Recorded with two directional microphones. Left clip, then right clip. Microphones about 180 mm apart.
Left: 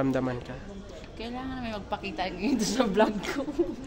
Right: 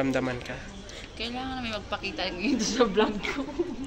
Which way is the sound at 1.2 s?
60° left (ahead or behind).